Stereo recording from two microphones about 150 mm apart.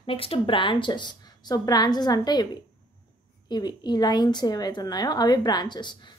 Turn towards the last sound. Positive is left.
turn(degrees=30)  # may be behind; listen again after turning